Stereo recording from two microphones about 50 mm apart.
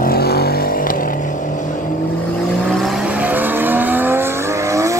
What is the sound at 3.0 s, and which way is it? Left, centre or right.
Vehicle, right.